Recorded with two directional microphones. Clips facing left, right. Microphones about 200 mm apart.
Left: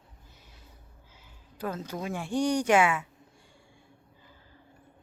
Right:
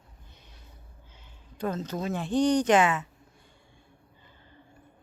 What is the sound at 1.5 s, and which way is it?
Speech, 10° left (ahead or behind).